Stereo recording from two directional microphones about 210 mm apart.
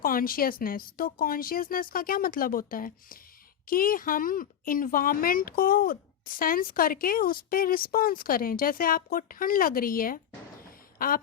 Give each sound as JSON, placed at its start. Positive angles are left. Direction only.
{"t": 0.0, "sound": "speech", "side_deg": 45}